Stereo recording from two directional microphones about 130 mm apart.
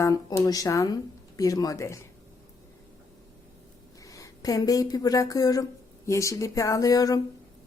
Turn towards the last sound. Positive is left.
turn(degrees=30)  # may be behind; listen again after turning